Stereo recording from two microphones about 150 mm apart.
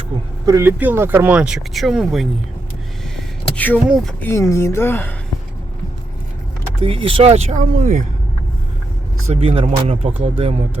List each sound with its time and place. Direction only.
0.4 s speech: 20° right (ahead or behind); by 2.2 s centre (ahead or behind)
3.2 s a sound: 10° left (ahead or behind)
4.2 s a woman's voice: 15° left (ahead or behind)
6.8 s speech: 35° right (ahead or behind)
7.6 s speech: 60° right (ahead or behind)
9.3 s speech: 40° right (ahead or behind)